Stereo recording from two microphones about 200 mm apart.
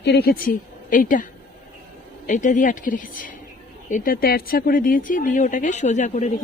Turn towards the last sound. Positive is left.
turn(degrees=35)  # may be behind; listen again after turning